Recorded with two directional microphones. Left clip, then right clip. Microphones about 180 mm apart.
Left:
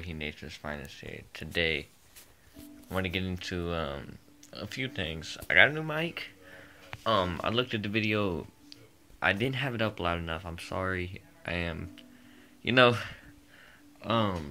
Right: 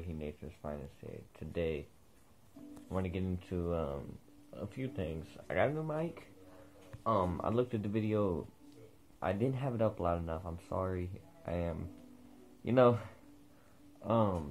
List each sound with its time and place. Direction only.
0.0 s speech: 10° left (ahead or behind)
2.9 s speech: 15° left (ahead or behind)
7.0 s speech: 45° left (ahead or behind)
7.4 s speech: 5° left (ahead or behind)
8.2 s speech: 40° left (ahead or behind)
9.2 s speech: 10° left (ahead or behind)